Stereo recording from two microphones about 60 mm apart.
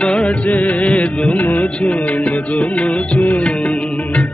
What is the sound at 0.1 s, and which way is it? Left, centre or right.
Music, centre.